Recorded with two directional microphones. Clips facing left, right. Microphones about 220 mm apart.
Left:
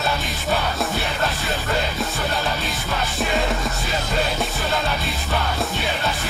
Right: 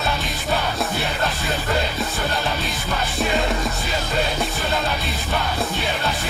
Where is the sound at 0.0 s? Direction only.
Centre (ahead or behind).